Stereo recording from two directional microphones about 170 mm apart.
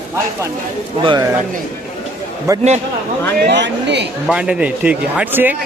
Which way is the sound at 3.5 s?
90° right.